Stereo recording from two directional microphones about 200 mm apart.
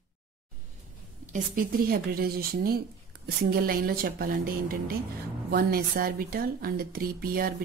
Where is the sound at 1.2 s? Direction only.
40° right (ahead or behind).